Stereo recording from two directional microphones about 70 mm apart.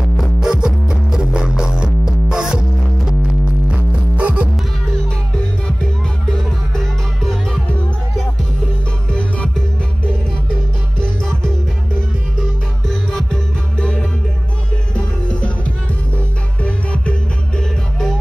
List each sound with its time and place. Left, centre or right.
0.4 s music: centre
3.7 s music: centre
6.7 s music: centre
11.0 s music: centre
12.8 s music: centre
16.6 s music: centre